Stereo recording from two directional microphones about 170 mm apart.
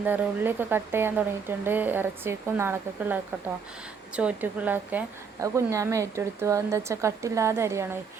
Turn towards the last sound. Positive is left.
turn(degrees=-15)  # may be behind; listen again after turning